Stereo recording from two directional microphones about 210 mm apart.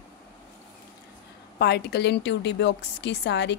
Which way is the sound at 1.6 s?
50° left (ahead or behind).